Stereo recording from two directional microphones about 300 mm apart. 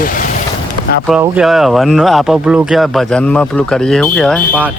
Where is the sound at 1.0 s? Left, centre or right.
Centre.